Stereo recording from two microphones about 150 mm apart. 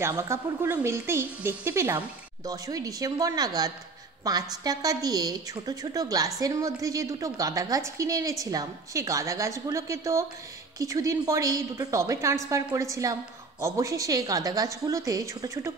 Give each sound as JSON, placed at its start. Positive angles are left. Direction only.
{"t": 0.0, "sound": "a woman's voice", "side_deg": -20}